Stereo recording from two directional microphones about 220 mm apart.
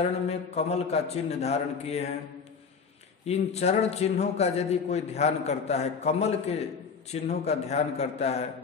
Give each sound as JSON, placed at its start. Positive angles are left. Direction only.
{"t": 0.0, "sound": "a man's voice", "side_deg": 30}
{"t": 3.3, "sound": "a man's voice", "side_deg": 30}